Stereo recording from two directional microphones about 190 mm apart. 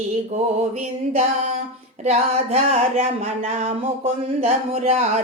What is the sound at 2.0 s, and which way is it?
A woman's voice, 35° right (ahead or behind).